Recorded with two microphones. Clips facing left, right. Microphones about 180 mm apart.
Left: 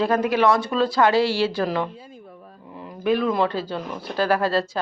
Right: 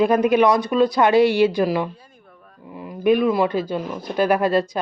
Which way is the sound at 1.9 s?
25° left (ahead or behind).